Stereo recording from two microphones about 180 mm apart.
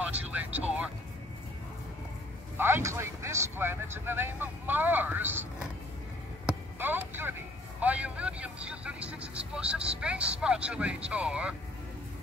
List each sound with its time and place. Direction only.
0.1 s vehicle: 10° right (ahead or behind)
2.5 s a man's voice: 15° right (ahead or behind)
6.4 s a sound: 10° right (ahead or behind)
7.8 s a man's voice: 10° right (ahead or behind)